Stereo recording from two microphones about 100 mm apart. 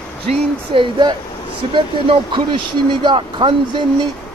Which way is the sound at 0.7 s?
50° right (ahead or behind).